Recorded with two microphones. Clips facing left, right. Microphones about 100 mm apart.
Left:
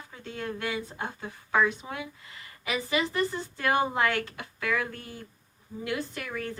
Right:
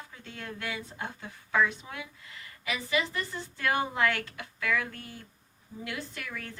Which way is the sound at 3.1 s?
15° left (ahead or behind).